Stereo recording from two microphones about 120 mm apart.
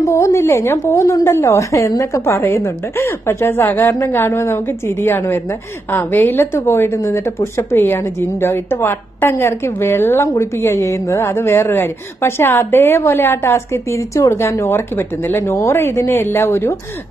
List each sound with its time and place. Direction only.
0.0 s a woman's voice: 25° left (ahead or behind)